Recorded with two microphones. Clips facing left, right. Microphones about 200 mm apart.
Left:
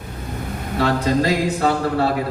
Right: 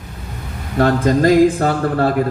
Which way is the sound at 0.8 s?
50° right (ahead or behind).